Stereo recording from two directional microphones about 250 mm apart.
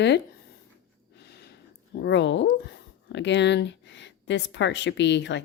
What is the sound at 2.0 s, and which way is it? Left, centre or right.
Speech, left.